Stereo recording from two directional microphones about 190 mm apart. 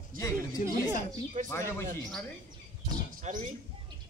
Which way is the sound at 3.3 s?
40° right (ahead or behind).